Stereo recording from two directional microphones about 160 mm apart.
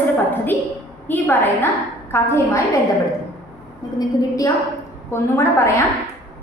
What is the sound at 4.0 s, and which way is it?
A woman's voice, 20° left (ahead or behind).